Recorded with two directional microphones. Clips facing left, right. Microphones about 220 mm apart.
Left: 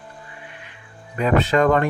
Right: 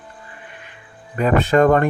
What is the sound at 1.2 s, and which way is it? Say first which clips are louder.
Speech: right 3 dB; 50° right (ahead or behind).